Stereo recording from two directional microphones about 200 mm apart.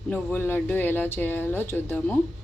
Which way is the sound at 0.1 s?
10° left (ahead or behind).